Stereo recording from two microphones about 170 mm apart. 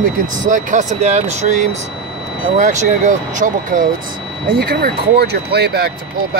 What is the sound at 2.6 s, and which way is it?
Speech, 50° right (ahead or behind).